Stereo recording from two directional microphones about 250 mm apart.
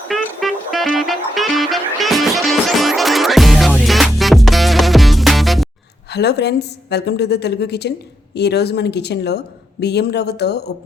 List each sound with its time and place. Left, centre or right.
0.1 s music: centre
6.1 s a woman's voice: left